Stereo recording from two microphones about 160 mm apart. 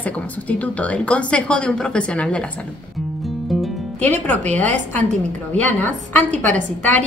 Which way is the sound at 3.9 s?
45° right (ahead or behind).